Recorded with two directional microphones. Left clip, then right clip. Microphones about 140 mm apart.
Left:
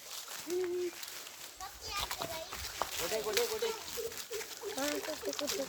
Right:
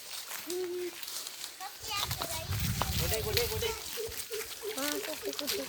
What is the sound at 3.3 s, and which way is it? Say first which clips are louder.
Speech: right 1 dB; 15° left (ahead or behind).